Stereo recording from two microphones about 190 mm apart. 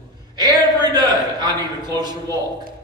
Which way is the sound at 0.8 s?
20° right (ahead or behind).